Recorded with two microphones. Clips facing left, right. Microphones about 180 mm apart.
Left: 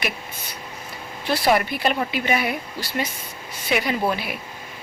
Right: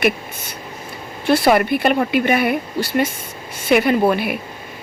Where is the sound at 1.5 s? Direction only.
55° right (ahead or behind).